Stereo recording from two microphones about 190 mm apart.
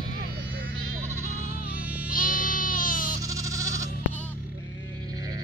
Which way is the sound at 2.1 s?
45° left (ahead or behind).